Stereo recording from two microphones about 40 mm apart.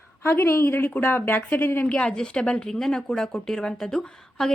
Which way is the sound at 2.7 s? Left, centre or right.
Centre.